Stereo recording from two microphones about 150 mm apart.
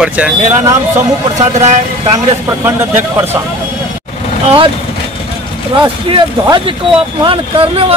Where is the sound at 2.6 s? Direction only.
15° right (ahead or behind).